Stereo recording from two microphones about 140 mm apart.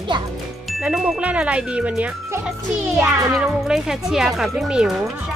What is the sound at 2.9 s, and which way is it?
Music, 20° right (ahead or behind).